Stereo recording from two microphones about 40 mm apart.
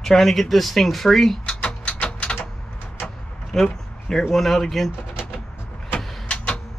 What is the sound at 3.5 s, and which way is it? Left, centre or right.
Speech, centre.